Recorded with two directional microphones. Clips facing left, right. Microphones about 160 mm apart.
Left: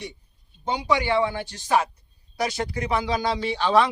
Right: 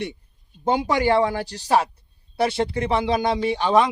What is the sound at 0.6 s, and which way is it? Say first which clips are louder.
Speech: right 4 dB; 50° right (ahead or behind).